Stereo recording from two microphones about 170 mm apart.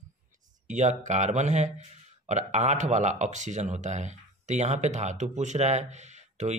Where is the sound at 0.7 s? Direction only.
45° right (ahead or behind).